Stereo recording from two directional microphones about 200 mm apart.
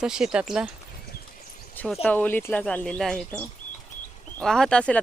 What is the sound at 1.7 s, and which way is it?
Speech, 5° left (ahead or behind).